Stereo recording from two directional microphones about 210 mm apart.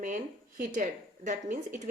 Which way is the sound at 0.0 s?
40° right (ahead or behind).